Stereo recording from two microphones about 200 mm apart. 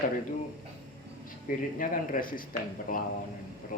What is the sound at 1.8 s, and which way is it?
A man's voice, 45° left (ahead or behind).